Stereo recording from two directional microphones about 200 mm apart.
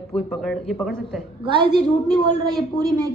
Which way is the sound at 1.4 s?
25° right (ahead or behind).